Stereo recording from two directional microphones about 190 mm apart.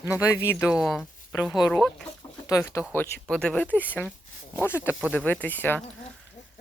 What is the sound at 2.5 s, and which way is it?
Speech, 15° left (ahead or behind).